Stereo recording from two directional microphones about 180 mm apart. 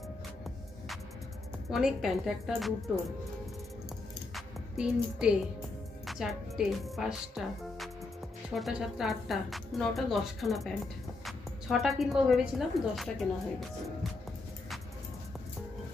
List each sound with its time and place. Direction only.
1.7 s a woman's voice: 5° right (ahead or behind)
4.3 s music: 5° right (ahead or behind)
6.0 s a woman's voice: centre (ahead or behind)
11.2 s music: centre (ahead or behind)
12.0 s a woman's voice: centre (ahead or behind)